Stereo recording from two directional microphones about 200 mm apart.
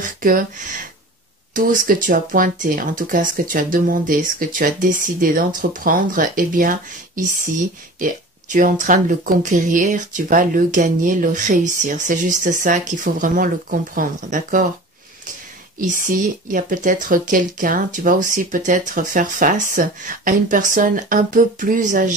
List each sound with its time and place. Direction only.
0.0 s speech: 40° right (ahead or behind)
1.5 s speech: 40° right (ahead or behind)
15.8 s speech: 40° right (ahead or behind)